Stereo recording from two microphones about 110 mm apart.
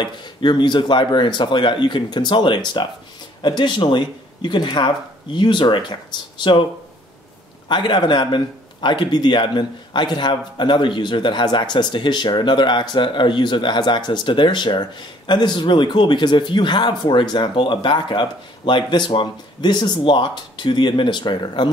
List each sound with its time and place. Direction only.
0.0 s a man's voice: 45° left (ahead or behind)
7.6 s a man's voice: 45° left (ahead or behind)